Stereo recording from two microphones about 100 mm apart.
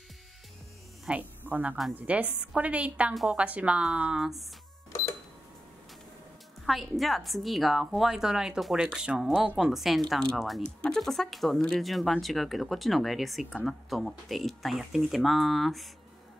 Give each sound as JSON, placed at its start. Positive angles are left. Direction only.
{"t": 1.0, "sound": "a woman's voice", "side_deg": -15}
{"t": 6.6, "sound": "a woman's voice", "side_deg": 0}